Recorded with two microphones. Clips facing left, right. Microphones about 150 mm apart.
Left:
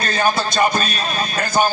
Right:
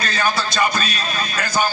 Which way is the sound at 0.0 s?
50° left (ahead or behind).